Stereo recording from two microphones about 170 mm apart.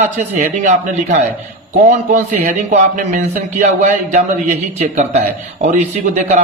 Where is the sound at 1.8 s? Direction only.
45° right (ahead or behind).